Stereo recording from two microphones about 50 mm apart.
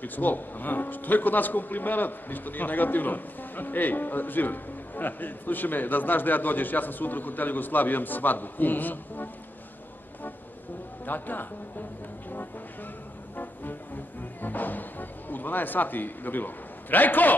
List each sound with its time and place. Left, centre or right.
0.0 s speech: left
11.1 s speech: left
14.4 s speech: left